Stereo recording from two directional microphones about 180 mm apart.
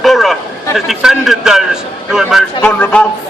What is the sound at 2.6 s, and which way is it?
Speech, 10° left (ahead or behind).